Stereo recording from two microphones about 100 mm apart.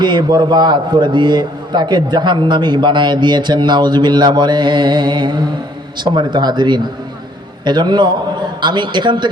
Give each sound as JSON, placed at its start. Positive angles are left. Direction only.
{"t": 0.0, "sound": "a man's voice", "side_deg": -45}